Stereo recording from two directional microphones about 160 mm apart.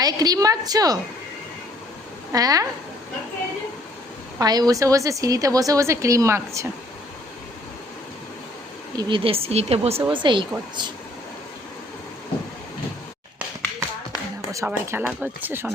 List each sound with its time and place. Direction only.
0.0 s a woman's voice: 25° right (ahead or behind)
2.3 s a woman's voice: 20° right (ahead or behind)
4.4 s a woman's voice: 25° right (ahead or behind)
9.0 s speech: 30° right (ahead or behind)
14.5 s speech: 15° right (ahead or behind)